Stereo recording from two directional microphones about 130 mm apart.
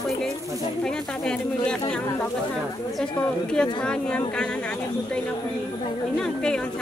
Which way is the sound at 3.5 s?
5° left (ahead or behind).